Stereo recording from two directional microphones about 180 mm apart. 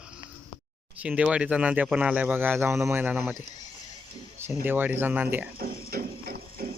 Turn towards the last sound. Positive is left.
turn(degrees=-55)  # may be behind; listen again after turning